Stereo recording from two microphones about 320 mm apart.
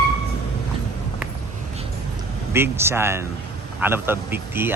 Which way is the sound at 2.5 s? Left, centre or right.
Centre.